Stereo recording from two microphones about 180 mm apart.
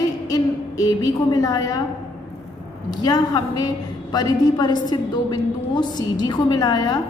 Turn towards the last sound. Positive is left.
turn(degrees=20)  # may be behind; listen again after turning